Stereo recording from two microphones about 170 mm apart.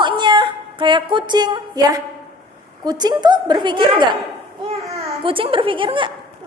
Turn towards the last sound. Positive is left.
turn(degrees=-30)  # may be behind; listen again after turning